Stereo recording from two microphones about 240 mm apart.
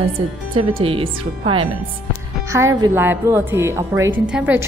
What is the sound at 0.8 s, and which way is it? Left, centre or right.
Speech, right.